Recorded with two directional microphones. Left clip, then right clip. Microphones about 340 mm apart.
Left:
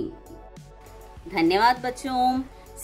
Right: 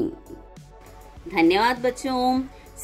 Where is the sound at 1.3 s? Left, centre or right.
Centre.